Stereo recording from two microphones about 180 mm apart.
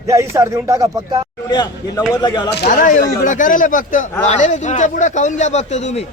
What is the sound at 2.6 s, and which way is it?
A man's voice, 45° left (ahead or behind).